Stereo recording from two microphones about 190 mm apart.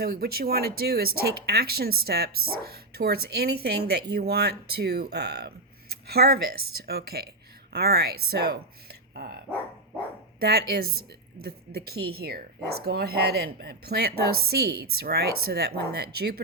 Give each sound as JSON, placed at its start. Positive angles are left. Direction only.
{"t": 0.0, "sound": "speech", "side_deg": -55}
{"t": 10.4, "sound": "speech", "side_deg": -55}